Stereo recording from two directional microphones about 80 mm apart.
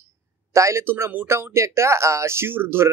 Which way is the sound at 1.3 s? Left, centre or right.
Right.